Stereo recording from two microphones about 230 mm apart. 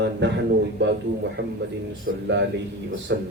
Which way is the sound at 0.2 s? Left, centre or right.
Right.